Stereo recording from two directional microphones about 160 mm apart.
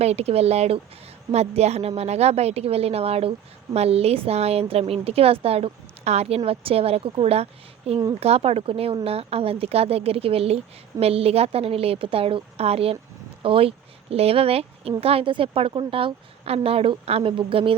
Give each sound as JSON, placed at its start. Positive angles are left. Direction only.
{"t": 0.0, "sound": "a woman's voice", "side_deg": -40}